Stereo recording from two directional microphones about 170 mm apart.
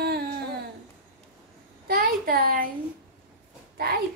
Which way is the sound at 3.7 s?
65° right (ahead or behind).